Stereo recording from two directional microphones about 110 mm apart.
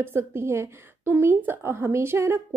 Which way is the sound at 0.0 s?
20° right (ahead or behind).